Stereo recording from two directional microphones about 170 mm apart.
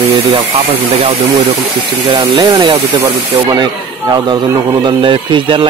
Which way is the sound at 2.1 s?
25° right (ahead or behind).